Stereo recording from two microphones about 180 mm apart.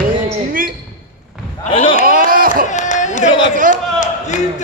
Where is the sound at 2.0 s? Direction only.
55° right (ahead or behind).